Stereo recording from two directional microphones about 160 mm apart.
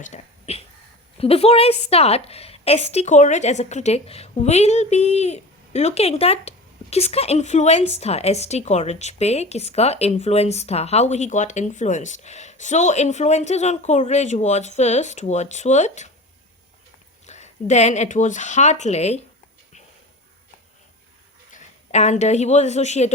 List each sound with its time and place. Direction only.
0.0 s a woman's voice: 45° left (ahead or behind)
17.2 s speech: 45° left (ahead or behind)
21.5 s a woman's voice: 45° left (ahead or behind)